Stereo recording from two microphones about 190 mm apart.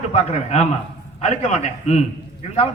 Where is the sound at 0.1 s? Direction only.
35° left (ahead or behind).